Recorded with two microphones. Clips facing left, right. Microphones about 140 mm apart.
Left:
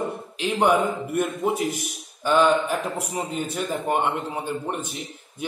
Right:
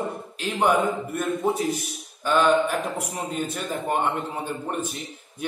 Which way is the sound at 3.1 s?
Centre (ahead or behind).